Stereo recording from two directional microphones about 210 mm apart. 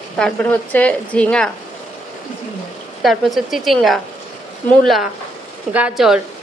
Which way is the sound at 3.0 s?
Centre (ahead or behind).